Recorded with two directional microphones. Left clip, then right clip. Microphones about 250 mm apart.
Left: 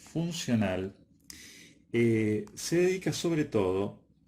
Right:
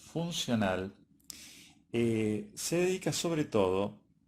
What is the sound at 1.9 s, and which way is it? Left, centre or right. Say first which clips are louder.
Speech: left 4 dB; centre.